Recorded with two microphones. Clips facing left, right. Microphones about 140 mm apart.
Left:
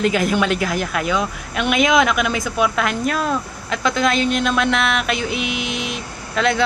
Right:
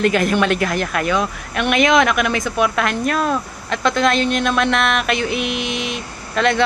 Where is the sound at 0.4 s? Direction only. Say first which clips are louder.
Right 2 dB; 55° right (ahead or behind).